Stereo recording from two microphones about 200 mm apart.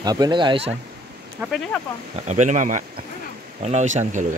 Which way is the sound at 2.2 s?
35° right (ahead or behind).